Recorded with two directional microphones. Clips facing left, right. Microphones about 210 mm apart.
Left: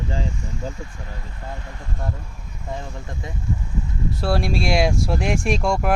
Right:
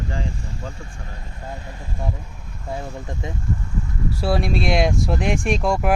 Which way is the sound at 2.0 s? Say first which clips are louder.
Right 2 dB; 5° right (ahead or behind).